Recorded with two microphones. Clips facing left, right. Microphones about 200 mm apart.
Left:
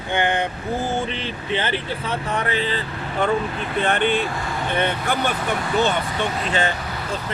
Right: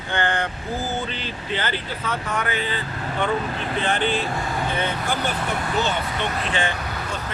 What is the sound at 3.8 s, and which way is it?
Speech, 60° left (ahead or behind).